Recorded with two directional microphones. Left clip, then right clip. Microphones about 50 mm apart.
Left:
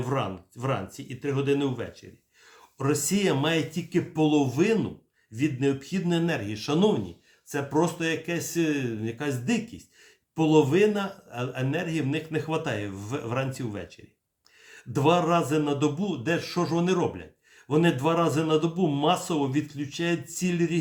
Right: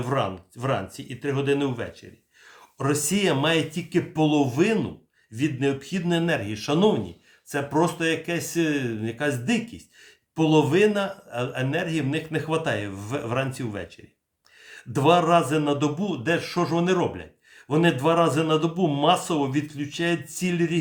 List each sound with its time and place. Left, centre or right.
0.0 s a man's voice: right